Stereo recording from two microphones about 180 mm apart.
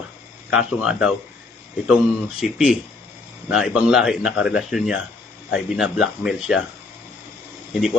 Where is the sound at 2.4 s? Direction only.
Centre (ahead or behind).